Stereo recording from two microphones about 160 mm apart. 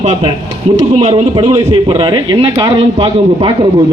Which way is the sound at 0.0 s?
45° right (ahead or behind).